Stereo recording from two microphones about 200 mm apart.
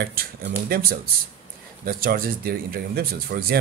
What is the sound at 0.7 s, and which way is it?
Speech, 45° right (ahead or behind).